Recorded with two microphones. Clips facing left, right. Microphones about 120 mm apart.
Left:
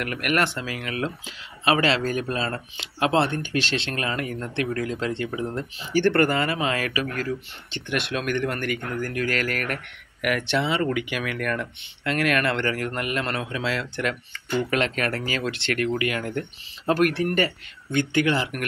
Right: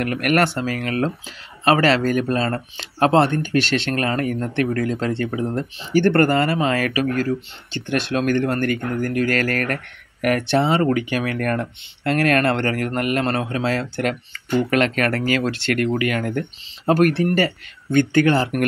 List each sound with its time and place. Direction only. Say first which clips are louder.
0.0 s speech: right 6 dB; 45° right (ahead or behind)
8.9 s speech: right 4 dB; 50° right (ahead or behind)
14.7 s speech: right 5 dB; 50° right (ahead or behind)
16.9 s speech: right 5 dB; 35° right (ahead or behind)